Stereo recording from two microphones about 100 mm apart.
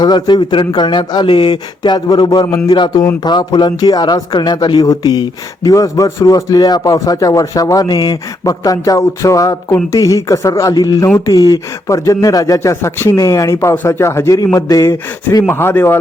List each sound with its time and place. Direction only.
0.0 s speech: 45° left (ahead or behind)
12.5 s a man's voice: 25° left (ahead or behind)
15.4 s a man's voice: 25° left (ahead or behind)